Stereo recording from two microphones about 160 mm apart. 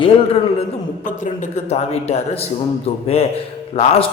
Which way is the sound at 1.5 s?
45° left (ahead or behind).